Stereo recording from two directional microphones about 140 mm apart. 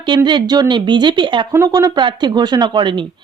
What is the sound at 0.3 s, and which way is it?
Speech, 30° right (ahead or behind).